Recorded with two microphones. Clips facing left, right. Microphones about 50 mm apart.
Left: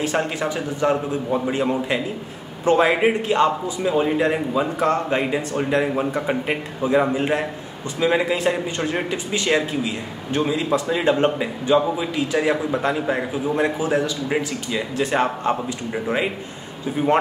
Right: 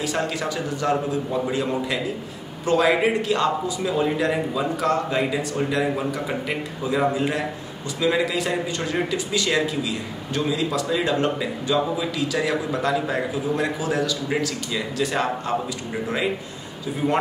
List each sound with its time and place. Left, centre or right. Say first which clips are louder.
0.0 s a man's voice: left 3 dB; left
16.8 s a man's voice: left 4 dB; left